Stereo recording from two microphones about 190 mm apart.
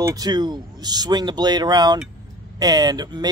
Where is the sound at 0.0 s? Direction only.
20° right (ahead or behind).